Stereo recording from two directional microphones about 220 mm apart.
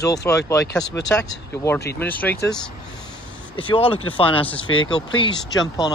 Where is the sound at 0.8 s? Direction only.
5° left (ahead or behind).